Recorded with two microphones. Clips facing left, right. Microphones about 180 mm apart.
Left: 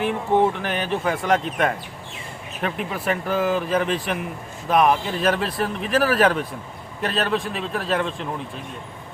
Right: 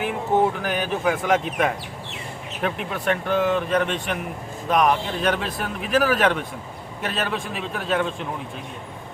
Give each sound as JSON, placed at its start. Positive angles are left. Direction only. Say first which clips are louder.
{"t": 0.0, "sound": "speech", "louder": "left 1 dB", "side_deg": -5}